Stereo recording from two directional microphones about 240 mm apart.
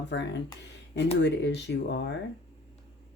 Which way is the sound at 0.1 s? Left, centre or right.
Left.